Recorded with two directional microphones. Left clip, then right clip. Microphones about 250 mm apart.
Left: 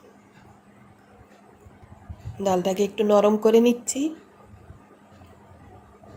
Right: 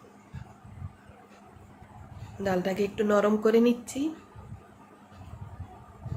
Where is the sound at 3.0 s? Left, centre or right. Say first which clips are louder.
Left 6 dB; centre.